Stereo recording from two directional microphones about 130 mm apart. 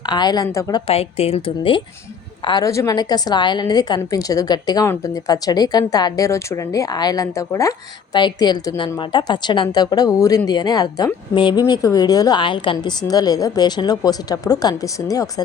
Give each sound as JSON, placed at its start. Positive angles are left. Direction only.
{"t": 0.0, "sound": "speech", "side_deg": 35}
{"t": 0.9, "sound": "a woman's voice", "side_deg": 50}
{"t": 2.6, "sound": "speech", "side_deg": 25}